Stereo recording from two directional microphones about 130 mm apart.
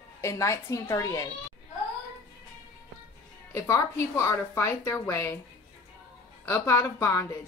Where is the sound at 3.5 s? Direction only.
20° left (ahead or behind).